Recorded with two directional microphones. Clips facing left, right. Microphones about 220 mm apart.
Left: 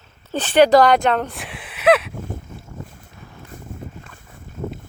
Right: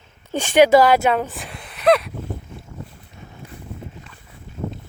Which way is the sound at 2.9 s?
45° left (ahead or behind).